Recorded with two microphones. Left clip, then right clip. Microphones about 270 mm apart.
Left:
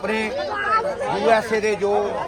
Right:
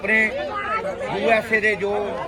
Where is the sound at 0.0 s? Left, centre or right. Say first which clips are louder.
Right 4 dB; centre.